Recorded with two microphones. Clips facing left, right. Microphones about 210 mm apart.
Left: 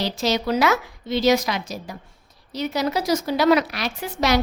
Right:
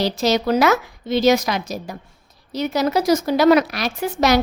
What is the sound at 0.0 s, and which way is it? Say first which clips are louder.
A woman's voice: right 4 dB; 40° right (ahead or behind).